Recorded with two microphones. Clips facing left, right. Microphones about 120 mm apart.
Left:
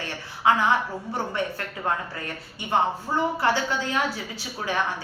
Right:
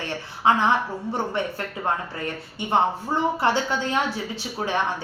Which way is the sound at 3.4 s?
20° right (ahead or behind).